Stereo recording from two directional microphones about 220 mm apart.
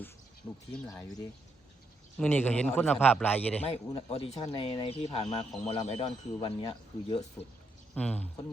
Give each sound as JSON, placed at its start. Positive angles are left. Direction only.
{"t": 0.7, "sound": "a man's voice", "side_deg": 10}
{"t": 3.6, "sound": "speech", "side_deg": 25}
{"t": 7.9, "sound": "speech", "side_deg": 5}